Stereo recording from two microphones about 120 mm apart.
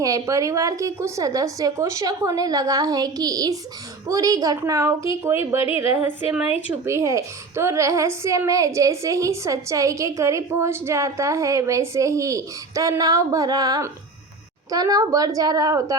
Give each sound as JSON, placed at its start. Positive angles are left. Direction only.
{"t": 0.0, "sound": "a child's voice", "side_deg": -25}
{"t": 6.8, "sound": "a child's voice", "side_deg": -25}